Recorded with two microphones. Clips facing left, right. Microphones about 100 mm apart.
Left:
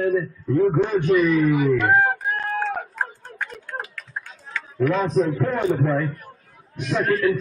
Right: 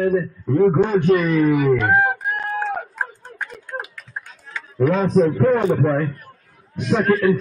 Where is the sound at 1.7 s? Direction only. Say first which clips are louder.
Right 1 dB; 15° right (ahead or behind).